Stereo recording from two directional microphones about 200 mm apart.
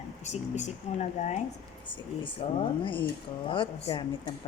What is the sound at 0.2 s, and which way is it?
A woman's voice, 35° left (ahead or behind).